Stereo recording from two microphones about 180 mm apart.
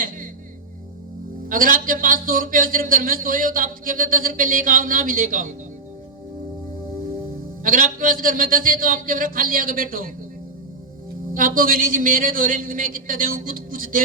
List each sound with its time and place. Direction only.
1.5 s a man's voice: 50° right (ahead or behind)
7.6 s a man's voice: 50° right (ahead or behind)
11.3 s a man's voice: 50° right (ahead or behind)